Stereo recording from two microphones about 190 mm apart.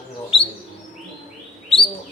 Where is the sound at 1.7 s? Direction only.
25° left (ahead or behind).